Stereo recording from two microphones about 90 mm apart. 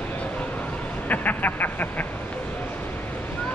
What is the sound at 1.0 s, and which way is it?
Vehicle, 20° left (ahead or behind).